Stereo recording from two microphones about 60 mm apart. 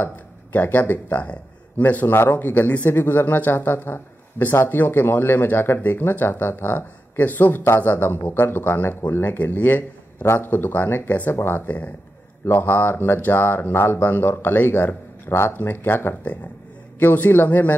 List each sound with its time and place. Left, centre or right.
0.0 s speech: left